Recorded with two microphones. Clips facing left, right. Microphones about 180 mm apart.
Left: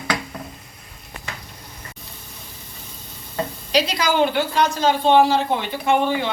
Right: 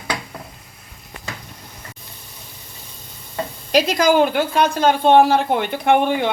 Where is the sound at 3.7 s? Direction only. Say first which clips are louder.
Right 5 dB; 50° right (ahead or behind).